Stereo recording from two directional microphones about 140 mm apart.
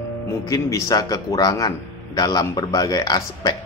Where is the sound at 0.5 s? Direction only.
25° left (ahead or behind).